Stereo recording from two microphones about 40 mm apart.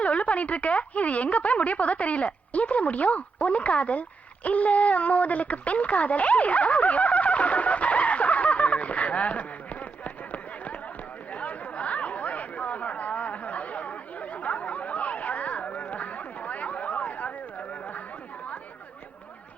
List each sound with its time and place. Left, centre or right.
0.0 s speech: left
4.4 s a sound: left
11.3 s chatter: left